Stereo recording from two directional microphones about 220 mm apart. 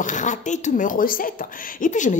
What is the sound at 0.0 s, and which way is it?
A woman's voice, 35° left (ahead or behind).